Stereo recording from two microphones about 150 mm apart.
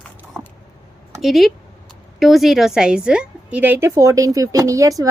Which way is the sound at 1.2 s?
Centre (ahead or behind).